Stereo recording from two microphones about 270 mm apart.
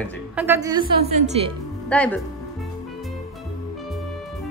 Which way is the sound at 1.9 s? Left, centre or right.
Centre.